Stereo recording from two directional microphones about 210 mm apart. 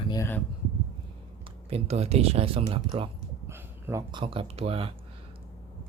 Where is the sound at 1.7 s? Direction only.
30° right (ahead or behind).